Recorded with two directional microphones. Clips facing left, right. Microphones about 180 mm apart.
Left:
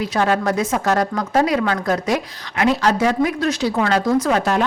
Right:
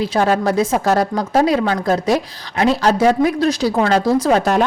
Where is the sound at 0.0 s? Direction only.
30° right (ahead or behind).